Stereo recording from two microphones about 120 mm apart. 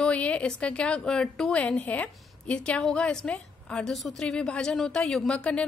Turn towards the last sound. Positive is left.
turn(degrees=10)  # may be behind; listen again after turning